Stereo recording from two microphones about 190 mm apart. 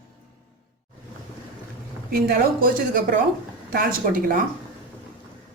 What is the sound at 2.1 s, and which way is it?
A woman's voice, 50° right (ahead or behind).